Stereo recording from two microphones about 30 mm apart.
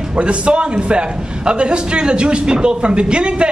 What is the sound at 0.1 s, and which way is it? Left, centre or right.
A man's voice, right.